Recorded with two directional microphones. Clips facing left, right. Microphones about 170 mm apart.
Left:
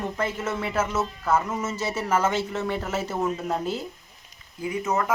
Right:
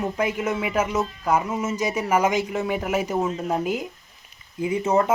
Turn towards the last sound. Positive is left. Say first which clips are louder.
# right 5 dB
turn(degrees=-25)  # may be behind; listen again after turning